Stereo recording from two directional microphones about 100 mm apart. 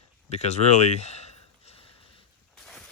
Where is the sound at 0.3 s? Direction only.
90° left.